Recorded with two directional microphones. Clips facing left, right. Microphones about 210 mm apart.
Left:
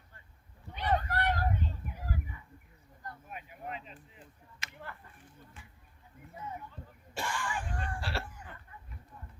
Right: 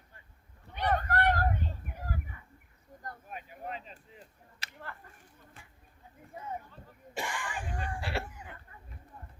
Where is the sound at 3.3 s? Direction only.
40° right (ahead or behind).